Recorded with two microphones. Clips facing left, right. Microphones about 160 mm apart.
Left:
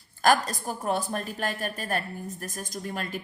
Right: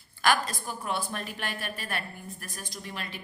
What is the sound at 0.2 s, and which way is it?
A woman's voice, 40° left (ahead or behind).